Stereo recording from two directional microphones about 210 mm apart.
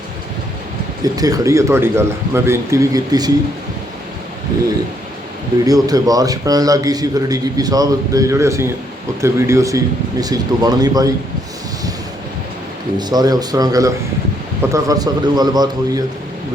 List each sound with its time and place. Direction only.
1.0 s a man's voice: 15° right (ahead or behind)
5.6 s a man's voice: 15° right (ahead or behind)
13.0 s a man's voice: 20° right (ahead or behind)